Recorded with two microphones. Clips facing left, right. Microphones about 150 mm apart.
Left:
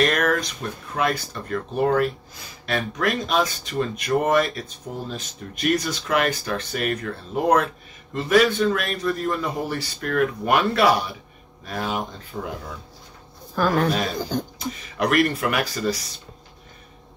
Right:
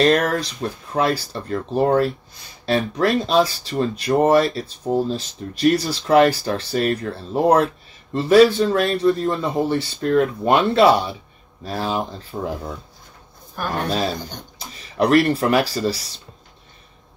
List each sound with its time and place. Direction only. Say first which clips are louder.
0.0 s speech: right 4 dB; 30° right (ahead or behind)
12.3 s speech: right 4 dB; 45° right (ahead or behind)
15.0 s speech: right 5 dB; 30° right (ahead or behind)